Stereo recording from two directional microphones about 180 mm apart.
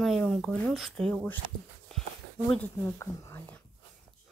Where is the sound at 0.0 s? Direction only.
Centre (ahead or behind).